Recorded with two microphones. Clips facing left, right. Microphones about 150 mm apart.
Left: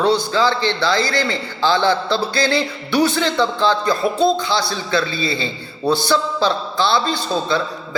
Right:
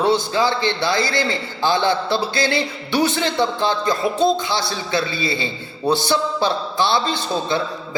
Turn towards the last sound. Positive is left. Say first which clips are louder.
# left 1 dB
turn(degrees=-20)  # may be behind; listen again after turning